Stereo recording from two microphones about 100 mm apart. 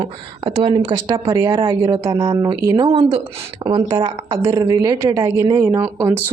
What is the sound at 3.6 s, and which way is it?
Speech, 60° right (ahead or behind).